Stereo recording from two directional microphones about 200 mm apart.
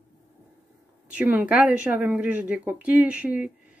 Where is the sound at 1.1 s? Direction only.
10° right (ahead or behind).